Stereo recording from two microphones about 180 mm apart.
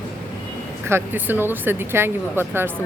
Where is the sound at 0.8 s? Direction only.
10° right (ahead or behind).